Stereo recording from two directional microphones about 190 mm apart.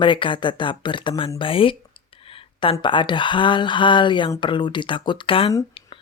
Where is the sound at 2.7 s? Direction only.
25° left (ahead or behind).